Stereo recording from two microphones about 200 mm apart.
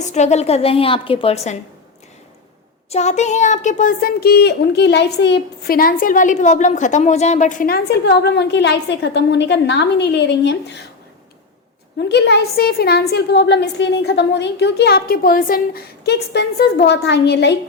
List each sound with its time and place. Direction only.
0.0 s a woman's voice: 35° left (ahead or behind)
2.9 s speech: 35° left (ahead or behind); by 10.8 s 60° left (ahead or behind)
12.0 s a woman's voice: 60° left (ahead or behind)